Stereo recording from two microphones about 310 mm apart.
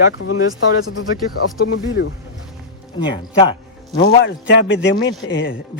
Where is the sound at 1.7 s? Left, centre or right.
Left.